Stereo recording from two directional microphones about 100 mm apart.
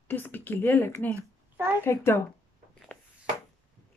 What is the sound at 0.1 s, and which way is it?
A woman's voice, 20° left (ahead or behind).